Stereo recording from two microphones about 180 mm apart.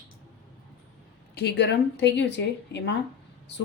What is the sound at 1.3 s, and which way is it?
A woman's voice, 70° left (ahead or behind).